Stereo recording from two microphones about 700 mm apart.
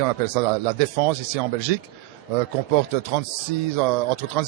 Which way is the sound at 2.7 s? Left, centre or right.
Right.